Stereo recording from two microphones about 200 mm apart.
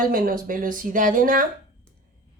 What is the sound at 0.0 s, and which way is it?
Speech, 45° right (ahead or behind).